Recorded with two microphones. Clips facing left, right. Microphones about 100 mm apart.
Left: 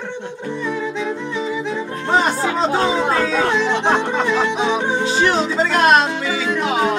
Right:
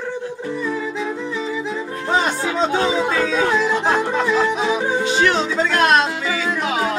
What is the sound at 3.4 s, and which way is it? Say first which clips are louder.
Music: left 1 dB; 5° right (ahead or behind).